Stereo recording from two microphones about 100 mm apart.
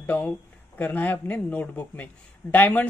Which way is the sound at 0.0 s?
20° left (ahead or behind).